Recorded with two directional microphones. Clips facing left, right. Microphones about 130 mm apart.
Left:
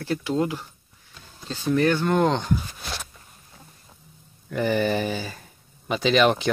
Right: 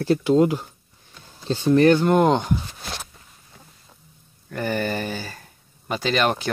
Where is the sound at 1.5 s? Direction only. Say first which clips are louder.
Right 6 dB; 25° right (ahead or behind).